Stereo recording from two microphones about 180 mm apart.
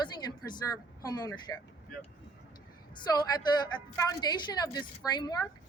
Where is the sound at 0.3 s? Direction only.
20° left (ahead or behind).